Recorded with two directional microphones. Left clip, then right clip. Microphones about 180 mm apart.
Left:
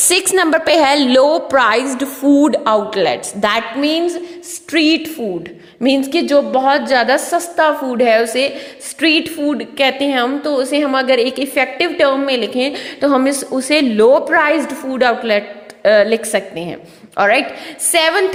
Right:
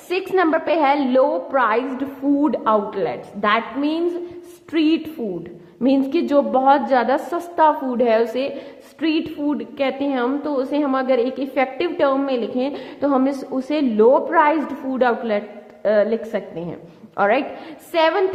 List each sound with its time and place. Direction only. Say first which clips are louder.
0.1 s a woman's voice: left 4 dB; 35° left (ahead or behind)
3.8 s a woman's voice: left 5 dB; 10° left (ahead or behind)
7.3 s a woman's voice: left 3 dB; 5° left (ahead or behind)